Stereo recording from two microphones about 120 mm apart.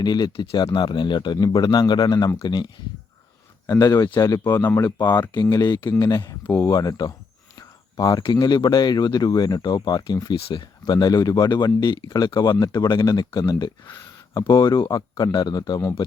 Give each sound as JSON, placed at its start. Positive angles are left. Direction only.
{"t": 0.0, "sound": "speech", "side_deg": 35}
{"t": 5.3, "sound": "speech", "side_deg": 35}